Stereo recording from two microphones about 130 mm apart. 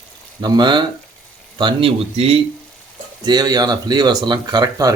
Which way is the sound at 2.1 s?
50° right (ahead or behind).